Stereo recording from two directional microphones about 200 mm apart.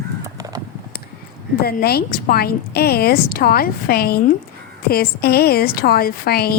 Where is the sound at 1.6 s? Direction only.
50° left (ahead or behind).